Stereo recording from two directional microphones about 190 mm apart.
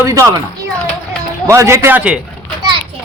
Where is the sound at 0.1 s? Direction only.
15° right (ahead or behind).